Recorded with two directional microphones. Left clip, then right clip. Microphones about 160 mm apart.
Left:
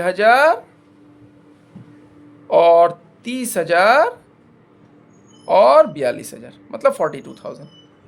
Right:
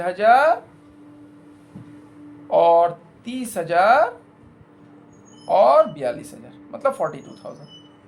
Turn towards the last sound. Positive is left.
turn(degrees=85)